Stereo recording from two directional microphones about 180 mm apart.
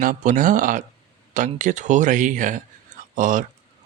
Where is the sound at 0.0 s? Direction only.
45° right (ahead or behind).